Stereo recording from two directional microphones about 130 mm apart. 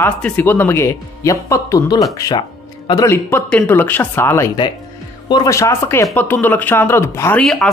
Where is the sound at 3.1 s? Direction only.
15° left (ahead or behind).